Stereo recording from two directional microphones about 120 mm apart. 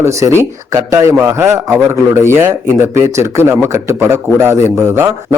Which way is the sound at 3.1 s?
20° right (ahead or behind).